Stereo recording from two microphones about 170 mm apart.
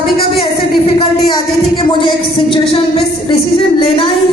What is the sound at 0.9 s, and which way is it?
Music, 35° left (ahead or behind).